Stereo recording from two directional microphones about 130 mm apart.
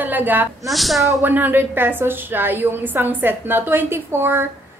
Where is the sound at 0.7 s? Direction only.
Centre (ahead or behind).